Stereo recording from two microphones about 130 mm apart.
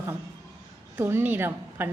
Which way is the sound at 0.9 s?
15° right (ahead or behind).